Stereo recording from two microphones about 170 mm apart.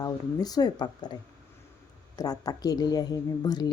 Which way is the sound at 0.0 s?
20° left (ahead or behind).